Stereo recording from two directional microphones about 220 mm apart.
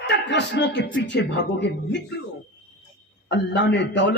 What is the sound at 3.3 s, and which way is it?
Speech, 50° left (ahead or behind).